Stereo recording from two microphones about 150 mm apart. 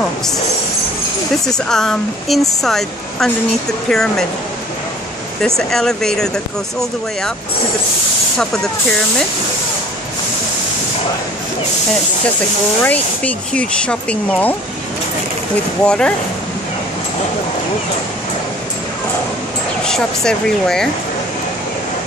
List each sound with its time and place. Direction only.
1.4 s speech: 5° left (ahead or behind)
5.7 s speech: 5° left (ahead or behind)
12.8 s speech: 10° left (ahead or behind)
15.8 s speech: 5° left (ahead or behind)
19.8 s speech: 5° left (ahead or behind)